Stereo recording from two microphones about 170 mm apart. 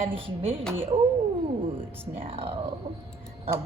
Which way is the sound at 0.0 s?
35° right (ahead or behind).